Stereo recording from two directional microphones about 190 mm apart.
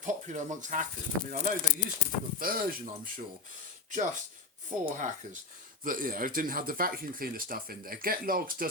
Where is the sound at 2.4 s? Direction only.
50° right (ahead or behind).